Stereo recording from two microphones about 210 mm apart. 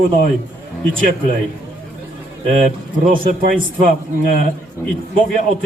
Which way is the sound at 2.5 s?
40° right (ahead or behind).